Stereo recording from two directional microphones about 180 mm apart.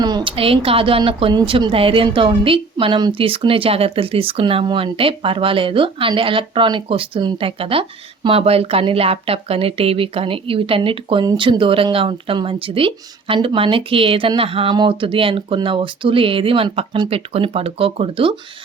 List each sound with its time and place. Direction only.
0.0 s speech: 25° right (ahead or behind)